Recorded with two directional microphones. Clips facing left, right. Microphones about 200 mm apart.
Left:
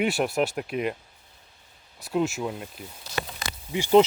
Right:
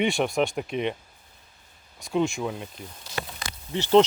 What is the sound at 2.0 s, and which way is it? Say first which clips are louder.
Speech: right 1 dB; 5° left (ahead or behind).